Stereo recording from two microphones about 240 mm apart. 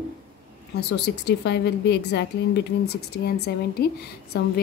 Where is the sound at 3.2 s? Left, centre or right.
Left.